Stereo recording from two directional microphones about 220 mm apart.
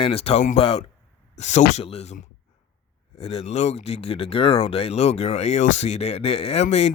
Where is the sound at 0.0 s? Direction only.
25° left (ahead or behind).